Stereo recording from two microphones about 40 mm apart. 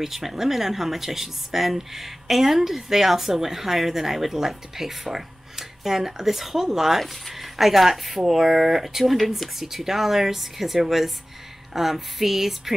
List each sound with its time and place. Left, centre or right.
0.0 s speech: centre